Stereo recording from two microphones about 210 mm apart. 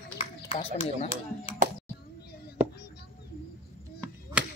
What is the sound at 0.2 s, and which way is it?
Speech, 25° left (ahead or behind).